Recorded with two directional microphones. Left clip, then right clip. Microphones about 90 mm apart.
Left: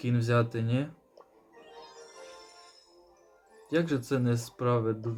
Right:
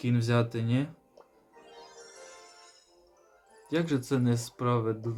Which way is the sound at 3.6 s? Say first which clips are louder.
Left 1 dB; 5° right (ahead or behind).